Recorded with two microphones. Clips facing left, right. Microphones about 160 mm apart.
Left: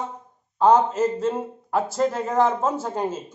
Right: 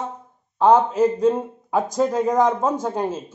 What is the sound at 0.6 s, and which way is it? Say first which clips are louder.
A man's voice: right 2 dB; 10° right (ahead or behind).